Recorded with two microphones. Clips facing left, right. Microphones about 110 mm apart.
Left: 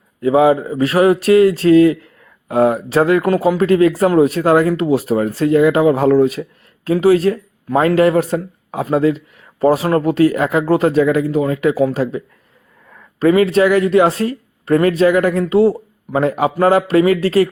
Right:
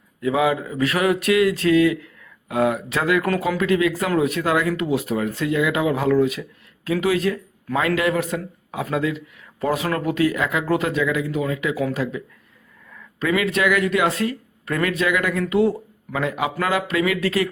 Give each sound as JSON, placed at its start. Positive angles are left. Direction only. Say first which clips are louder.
{"t": 0.2, "sound": "speech", "louder": "left 8 dB", "side_deg": 35}
{"t": 3.6, "sound": "speech", "louder": "left 9 dB", "side_deg": 40}